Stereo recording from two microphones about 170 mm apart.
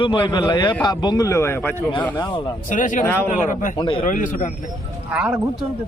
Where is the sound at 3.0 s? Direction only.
15° left (ahead or behind).